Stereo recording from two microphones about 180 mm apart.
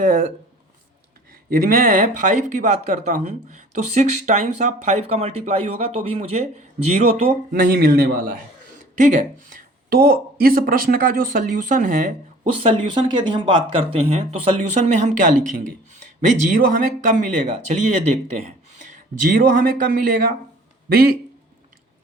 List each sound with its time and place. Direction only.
0.0 s speech: 45° right (ahead or behind)
1.5 s speech: 50° right (ahead or behind)
7.5 s speech: 55° right (ahead or behind)
12.8 s speech: 25° right (ahead or behind)
18.9 s a man's voice: 50° right (ahead or behind)